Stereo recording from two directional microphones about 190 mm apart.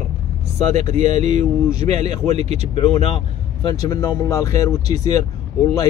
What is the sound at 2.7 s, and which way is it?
Speech, 30° left (ahead or behind).